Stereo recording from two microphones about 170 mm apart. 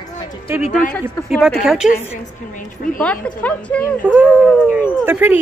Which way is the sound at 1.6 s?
5° right (ahead or behind).